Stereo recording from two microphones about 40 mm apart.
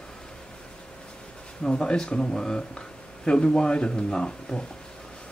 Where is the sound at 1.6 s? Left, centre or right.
Left.